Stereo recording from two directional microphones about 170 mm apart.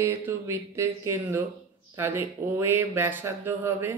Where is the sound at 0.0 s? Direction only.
15° right (ahead or behind).